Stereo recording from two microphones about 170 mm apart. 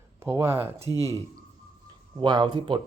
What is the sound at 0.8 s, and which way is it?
Speech, 20° left (ahead or behind).